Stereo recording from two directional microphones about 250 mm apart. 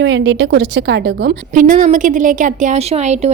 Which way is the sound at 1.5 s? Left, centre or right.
Right.